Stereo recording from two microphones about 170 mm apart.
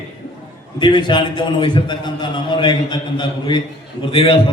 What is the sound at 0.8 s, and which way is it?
A man's voice, 25° left (ahead or behind).